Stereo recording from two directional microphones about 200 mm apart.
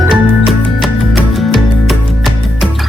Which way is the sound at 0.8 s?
Centre (ahead or behind).